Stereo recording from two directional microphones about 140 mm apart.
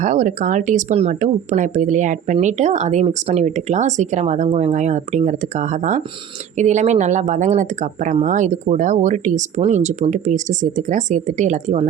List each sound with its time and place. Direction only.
0.0 s speech: 65° right (ahead or behind)